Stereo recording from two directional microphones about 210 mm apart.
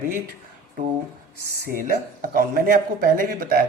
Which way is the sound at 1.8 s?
40° right (ahead or behind).